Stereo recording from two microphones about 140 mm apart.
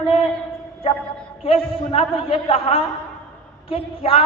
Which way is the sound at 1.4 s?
40° left (ahead or behind).